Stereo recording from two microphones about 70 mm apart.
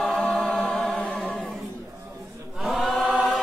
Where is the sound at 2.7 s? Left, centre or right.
Centre.